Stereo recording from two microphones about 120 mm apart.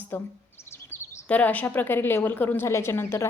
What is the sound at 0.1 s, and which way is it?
A woman's voice, 20° left (ahead or behind).